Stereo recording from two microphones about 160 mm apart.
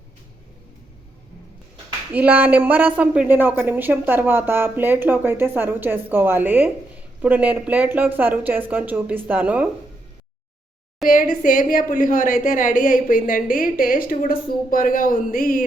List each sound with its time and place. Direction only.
2.1 s speech: 10° right (ahead or behind)
11.1 s a woman's voice: 55° left (ahead or behind)